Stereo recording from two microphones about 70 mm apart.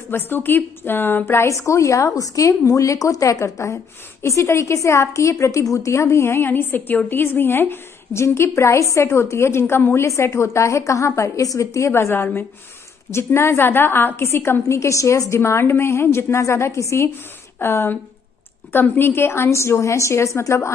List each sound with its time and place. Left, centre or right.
0.1 s a woman's voice: left
1.5 s a woman's voice: left